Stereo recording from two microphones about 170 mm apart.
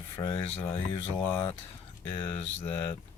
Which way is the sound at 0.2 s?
30° left (ahead or behind).